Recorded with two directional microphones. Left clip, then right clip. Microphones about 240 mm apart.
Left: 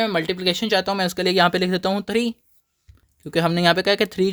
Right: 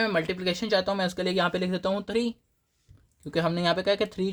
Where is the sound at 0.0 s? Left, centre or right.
Left.